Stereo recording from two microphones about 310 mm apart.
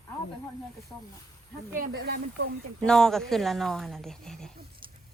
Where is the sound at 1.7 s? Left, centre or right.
Right.